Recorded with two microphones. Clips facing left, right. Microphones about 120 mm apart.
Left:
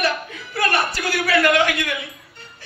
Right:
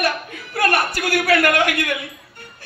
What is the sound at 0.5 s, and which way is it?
A man's voice, 50° right (ahead or behind).